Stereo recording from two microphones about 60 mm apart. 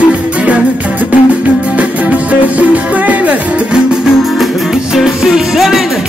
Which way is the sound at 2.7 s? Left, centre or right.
Right.